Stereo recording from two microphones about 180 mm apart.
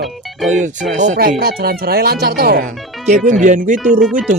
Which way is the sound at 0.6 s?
45° right (ahead or behind).